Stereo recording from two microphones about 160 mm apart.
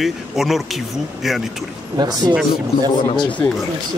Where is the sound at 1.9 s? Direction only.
25° right (ahead or behind).